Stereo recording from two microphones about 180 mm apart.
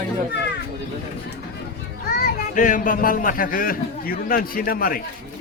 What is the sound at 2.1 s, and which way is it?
Speech, 55° left (ahead or behind).